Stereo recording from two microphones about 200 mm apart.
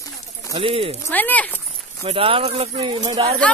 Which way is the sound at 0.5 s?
25° right (ahead or behind).